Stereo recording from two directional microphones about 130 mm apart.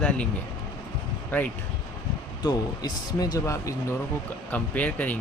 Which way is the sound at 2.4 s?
30° left (ahead or behind).